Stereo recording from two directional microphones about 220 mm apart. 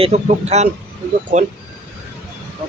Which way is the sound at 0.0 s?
30° right (ahead or behind).